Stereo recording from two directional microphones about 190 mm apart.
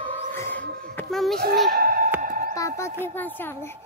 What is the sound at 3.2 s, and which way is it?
Speech, 10° left (ahead or behind).